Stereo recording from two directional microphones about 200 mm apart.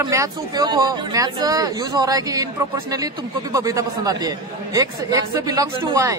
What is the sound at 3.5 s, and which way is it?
A man's voice, 15° right (ahead or behind).